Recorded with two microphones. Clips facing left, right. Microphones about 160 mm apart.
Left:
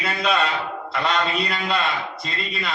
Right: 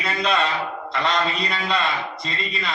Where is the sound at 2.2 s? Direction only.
5° left (ahead or behind).